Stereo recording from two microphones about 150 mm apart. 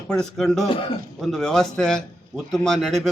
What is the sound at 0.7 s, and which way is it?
Speech, 35° left (ahead or behind).